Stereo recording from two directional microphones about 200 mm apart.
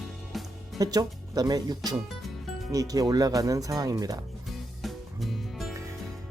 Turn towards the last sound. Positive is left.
turn(degrees=0)  # may be behind; listen again after turning